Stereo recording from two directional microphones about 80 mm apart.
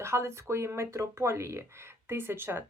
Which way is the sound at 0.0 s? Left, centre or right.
Right.